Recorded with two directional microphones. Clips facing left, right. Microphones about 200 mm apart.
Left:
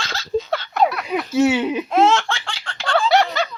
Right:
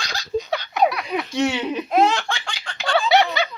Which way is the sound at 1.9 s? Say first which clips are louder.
Left 1 dB; 15° right (ahead or behind).